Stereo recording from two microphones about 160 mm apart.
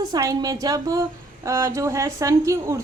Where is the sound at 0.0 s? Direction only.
20° right (ahead or behind).